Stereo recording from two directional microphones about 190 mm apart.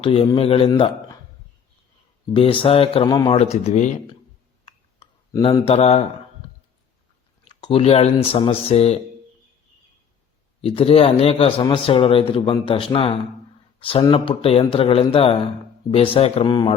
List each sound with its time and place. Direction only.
0.0 s a man's voice: 30° left (ahead or behind)
2.3 s a man's voice: 25° left (ahead or behind)
3.4 s speech: 35° left (ahead or behind)
4.6 s a sound: 25° left (ahead or behind)
7.4 s speech: 25° left (ahead or behind)
10.6 s a man's voice: 30° left (ahead or behind)